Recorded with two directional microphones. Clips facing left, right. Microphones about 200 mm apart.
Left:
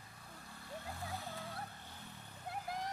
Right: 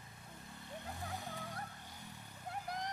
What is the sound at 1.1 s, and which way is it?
Music, 15° right (ahead or behind).